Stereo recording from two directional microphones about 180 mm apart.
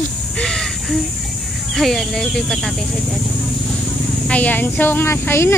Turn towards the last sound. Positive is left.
turn(degrees=15)  # may be behind; listen again after turning